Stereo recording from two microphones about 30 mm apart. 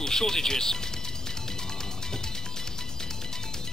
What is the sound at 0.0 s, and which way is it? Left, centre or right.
Speech, centre.